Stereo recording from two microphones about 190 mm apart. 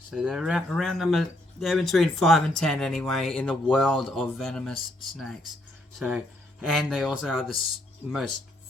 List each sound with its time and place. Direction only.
0.1 s speech: 5° right (ahead or behind)